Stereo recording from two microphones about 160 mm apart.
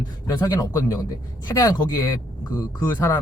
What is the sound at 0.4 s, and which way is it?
A man's voice, 20° left (ahead or behind).